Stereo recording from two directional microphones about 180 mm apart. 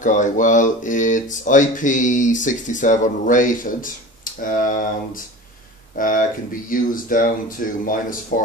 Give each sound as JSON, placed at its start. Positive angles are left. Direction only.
{"t": 0.0, "sound": "speech", "side_deg": 45}
{"t": 5.9, "sound": "speech", "side_deg": 50}